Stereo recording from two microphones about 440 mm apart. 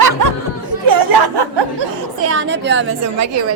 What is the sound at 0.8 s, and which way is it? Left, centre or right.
Speech, right.